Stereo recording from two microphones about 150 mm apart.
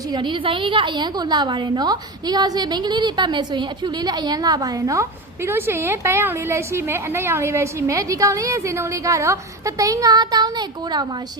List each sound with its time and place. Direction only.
0.1 s a woman's voice: 30° right (ahead or behind)